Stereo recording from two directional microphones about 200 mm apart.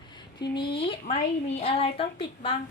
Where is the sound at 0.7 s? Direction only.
25° left (ahead or behind).